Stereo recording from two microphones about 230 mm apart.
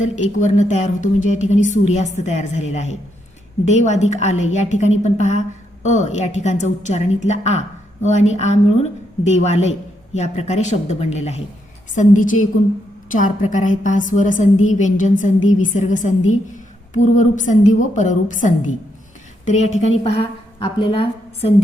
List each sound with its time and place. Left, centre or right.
0.0 s a woman's voice: left